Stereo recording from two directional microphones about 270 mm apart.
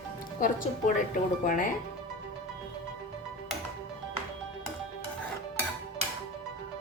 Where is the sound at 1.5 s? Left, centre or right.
Left.